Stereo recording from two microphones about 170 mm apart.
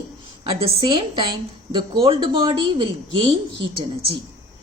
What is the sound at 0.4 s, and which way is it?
A woman's voice, 30° right (ahead or behind).